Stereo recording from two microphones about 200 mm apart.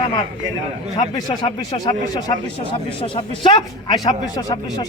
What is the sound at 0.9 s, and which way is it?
Speech, 25° left (ahead or behind).